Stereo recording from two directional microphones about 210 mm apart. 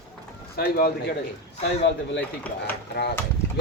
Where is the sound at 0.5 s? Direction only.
50° left (ahead or behind).